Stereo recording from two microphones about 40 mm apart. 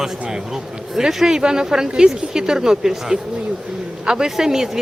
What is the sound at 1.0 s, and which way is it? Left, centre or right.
A woman's voice, centre.